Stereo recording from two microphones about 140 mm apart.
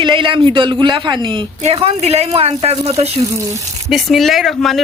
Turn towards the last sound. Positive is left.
turn(degrees=0)  # may be behind; listen again after turning